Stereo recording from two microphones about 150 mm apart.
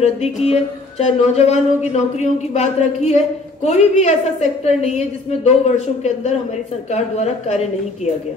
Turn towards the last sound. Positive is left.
turn(degrees=50)  # may be behind; listen again after turning